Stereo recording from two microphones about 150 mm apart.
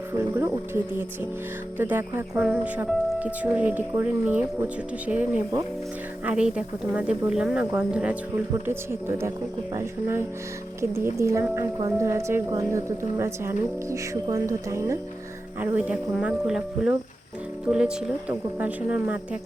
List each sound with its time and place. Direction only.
0.2 s speech: 15° right (ahead or behind)
6.2 s speech: 5° right (ahead or behind)
15.6 s speech: 10° right (ahead or behind)